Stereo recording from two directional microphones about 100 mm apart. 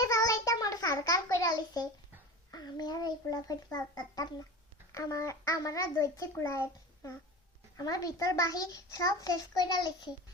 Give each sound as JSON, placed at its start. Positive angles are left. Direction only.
{"t": 0.0, "sound": "a sound", "side_deg": 35}
{"t": 2.5, "sound": "a child's voice", "side_deg": 40}
{"t": 7.8, "sound": "a child's voice", "side_deg": 40}